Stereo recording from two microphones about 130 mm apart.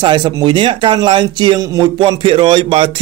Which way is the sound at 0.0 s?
35° right (ahead or behind).